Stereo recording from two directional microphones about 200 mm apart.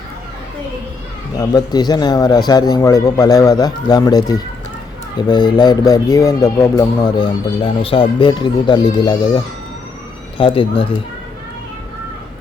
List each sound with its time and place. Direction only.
1.4 s speech: 20° left (ahead or behind)